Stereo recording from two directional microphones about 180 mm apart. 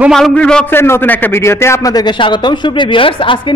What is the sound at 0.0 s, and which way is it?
A man's voice, centre (ahead or behind).